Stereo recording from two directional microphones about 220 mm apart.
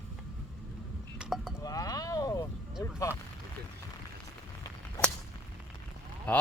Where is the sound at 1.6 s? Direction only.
15° left (ahead or behind).